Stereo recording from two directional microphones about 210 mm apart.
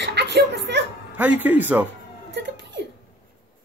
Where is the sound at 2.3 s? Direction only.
55° right (ahead or behind).